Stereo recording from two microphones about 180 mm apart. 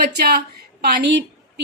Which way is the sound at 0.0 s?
60° right (ahead or behind).